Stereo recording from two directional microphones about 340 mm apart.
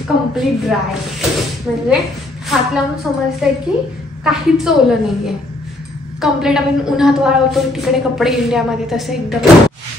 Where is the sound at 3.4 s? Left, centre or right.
Centre.